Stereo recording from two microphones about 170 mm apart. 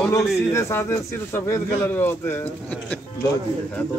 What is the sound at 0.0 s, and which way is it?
A man's voice, 15° left (ahead or behind).